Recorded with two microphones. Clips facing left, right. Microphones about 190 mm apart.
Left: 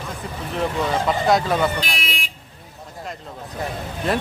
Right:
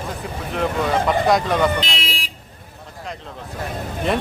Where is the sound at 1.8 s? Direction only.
25° right (ahead or behind).